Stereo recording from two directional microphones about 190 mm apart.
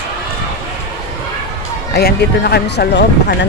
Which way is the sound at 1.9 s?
55° left (ahead or behind).